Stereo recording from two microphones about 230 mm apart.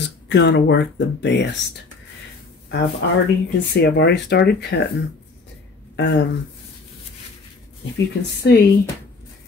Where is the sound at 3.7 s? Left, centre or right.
Left.